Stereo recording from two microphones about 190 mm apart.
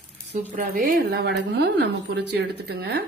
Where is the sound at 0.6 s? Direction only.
50° right (ahead or behind).